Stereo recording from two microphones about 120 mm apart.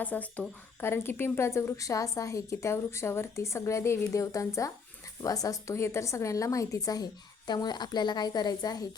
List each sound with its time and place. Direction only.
0.0 s a woman's voice: 15° left (ahead or behind); by 8.9 s 35° left (ahead or behind)